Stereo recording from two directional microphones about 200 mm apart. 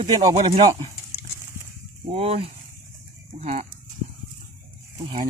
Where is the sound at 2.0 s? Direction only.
30° right (ahead or behind).